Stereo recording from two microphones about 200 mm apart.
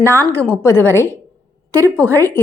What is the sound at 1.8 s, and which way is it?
Speech, 15° right (ahead or behind).